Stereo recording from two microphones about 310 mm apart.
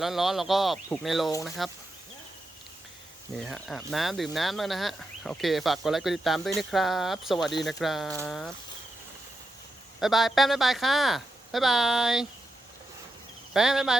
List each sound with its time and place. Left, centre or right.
0.0 s speech: centre
3.4 s speech: centre
10.0 s speech: centre
13.5 s speech: centre